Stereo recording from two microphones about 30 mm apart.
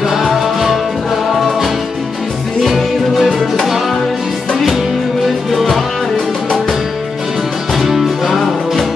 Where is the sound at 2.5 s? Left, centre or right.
Centre.